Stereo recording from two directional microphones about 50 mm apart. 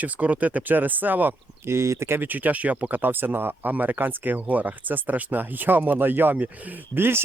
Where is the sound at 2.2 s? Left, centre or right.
Right.